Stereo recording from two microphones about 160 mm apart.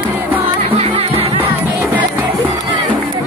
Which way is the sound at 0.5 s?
35° right (ahead or behind).